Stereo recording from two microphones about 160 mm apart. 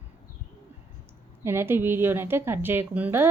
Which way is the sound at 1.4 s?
15° right (ahead or behind).